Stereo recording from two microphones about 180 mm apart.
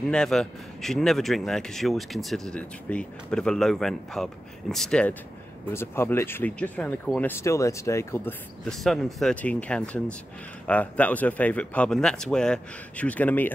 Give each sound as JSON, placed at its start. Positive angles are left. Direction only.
{"t": 0.0, "sound": "a man's voice", "side_deg": 5}
{"t": 8.6, "sound": "a man's voice", "side_deg": 0}